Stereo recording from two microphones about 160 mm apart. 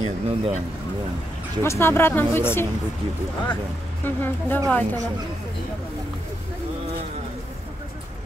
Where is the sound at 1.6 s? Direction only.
15° left (ahead or behind).